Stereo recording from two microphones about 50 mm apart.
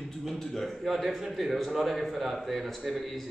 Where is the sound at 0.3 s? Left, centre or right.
Centre.